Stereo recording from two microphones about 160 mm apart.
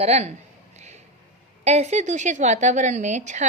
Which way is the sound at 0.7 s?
45° right (ahead or behind).